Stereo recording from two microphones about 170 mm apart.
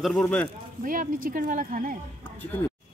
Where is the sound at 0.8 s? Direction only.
55° right (ahead or behind).